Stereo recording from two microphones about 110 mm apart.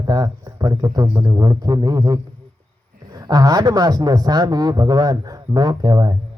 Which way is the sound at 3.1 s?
35° right (ahead or behind).